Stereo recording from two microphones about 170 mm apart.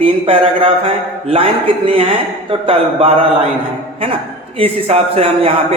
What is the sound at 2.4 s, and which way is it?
Speech, 35° right (ahead or behind).